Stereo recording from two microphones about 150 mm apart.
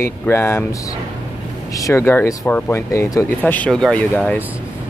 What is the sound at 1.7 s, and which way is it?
Speech, 20° left (ahead or behind).